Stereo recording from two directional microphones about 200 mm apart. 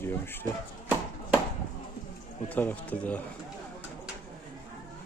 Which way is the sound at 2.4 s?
10° left (ahead or behind).